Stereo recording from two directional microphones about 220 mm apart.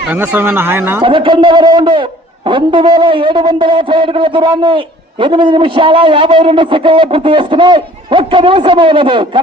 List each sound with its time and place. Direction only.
0.1 s speech: 10° right (ahead or behind)
1.0 s a man's voice: 25° right (ahead or behind)